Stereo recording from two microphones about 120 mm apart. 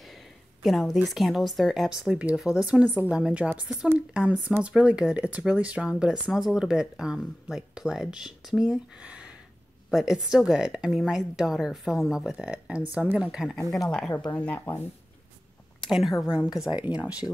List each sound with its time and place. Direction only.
0.6 s a woman's voice: centre (ahead or behind); by 14.6 s 15° left (ahead or behind)
15.8 s a woman's voice: centre (ahead or behind)